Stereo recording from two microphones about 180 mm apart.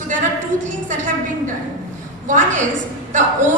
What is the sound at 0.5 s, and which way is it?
Speech, 45° right (ahead or behind).